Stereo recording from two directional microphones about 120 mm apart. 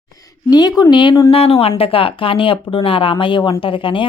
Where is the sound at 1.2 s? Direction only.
55° left (ahead or behind).